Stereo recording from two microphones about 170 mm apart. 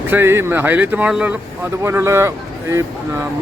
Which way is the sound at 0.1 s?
15° right (ahead or behind).